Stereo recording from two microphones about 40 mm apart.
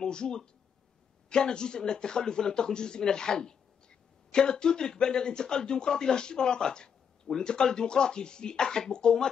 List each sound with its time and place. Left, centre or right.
0.0 s speech: centre